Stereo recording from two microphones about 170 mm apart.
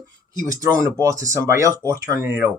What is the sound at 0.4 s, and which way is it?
Speech, 20° right (ahead or behind).